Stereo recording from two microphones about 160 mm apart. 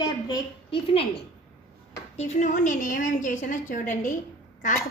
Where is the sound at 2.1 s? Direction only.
45° left (ahead or behind).